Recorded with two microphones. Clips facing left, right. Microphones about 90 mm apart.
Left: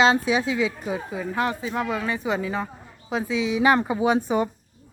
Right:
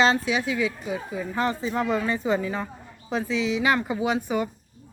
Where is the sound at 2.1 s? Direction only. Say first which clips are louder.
Even; 15° left (ahead or behind).